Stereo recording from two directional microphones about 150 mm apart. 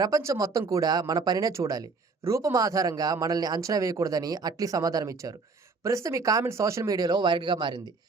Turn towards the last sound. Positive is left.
turn(degrees=-30)  # may be behind; listen again after turning